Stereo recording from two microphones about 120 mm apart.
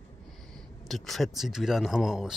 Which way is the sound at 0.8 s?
Centre (ahead or behind).